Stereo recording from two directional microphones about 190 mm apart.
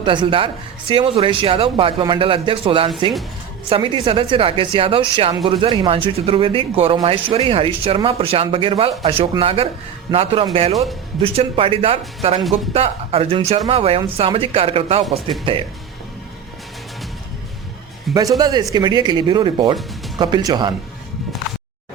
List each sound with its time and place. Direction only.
0.0 s a man's voice: 25° right (ahead or behind)
18.1 s speech: 20° right (ahead or behind)